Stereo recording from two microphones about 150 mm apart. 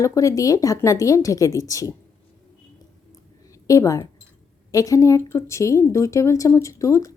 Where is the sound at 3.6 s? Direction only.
20° left (ahead or behind).